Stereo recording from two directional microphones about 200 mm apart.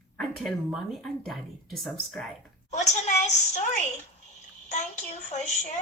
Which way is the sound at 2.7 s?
35° left (ahead or behind).